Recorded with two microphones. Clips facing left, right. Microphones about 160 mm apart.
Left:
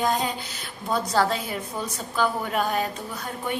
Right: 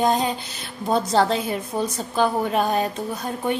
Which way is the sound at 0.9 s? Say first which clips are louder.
Right 4 dB; 25° right (ahead or behind).